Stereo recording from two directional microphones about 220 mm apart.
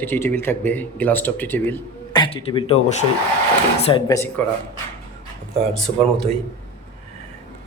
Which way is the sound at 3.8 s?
20° left (ahead or behind).